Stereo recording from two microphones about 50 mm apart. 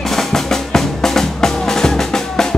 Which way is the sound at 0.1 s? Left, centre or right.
Centre.